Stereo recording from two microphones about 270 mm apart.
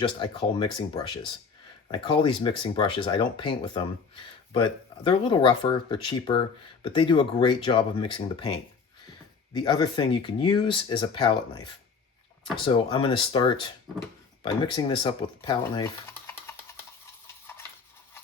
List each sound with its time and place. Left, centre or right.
0.0 s speech: centre